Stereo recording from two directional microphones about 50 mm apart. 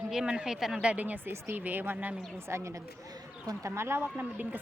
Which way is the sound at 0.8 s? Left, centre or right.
Right.